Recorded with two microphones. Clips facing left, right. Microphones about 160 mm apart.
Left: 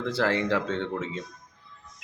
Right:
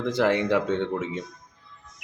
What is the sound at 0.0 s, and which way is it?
Speech, 15° right (ahead or behind).